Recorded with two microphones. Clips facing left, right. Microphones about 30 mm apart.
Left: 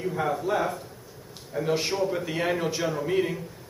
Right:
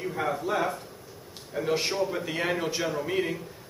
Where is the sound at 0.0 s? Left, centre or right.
Centre.